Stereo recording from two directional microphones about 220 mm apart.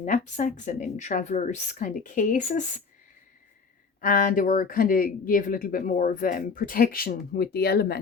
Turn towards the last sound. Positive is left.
turn(degrees=45)  # may be behind; listen again after turning